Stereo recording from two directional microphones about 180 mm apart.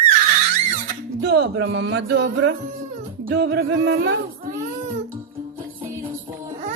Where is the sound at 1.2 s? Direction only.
65° right (ahead or behind).